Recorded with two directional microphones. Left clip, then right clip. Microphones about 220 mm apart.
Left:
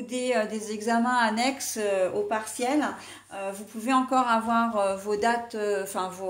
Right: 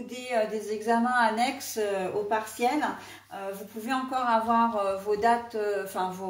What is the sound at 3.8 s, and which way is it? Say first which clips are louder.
Speech: left 6 dB; 45° left (ahead or behind).